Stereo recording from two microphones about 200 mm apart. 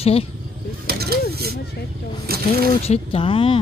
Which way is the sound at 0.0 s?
30° left (ahead or behind).